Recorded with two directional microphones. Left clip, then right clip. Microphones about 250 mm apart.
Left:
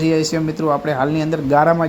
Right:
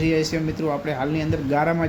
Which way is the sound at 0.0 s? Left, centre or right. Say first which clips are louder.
Left 4 dB; centre.